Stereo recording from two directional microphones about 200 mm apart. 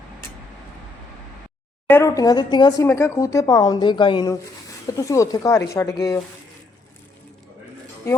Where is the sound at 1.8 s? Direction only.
15° left (ahead or behind).